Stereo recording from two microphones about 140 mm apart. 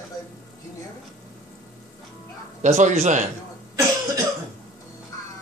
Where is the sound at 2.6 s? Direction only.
60° right (ahead or behind).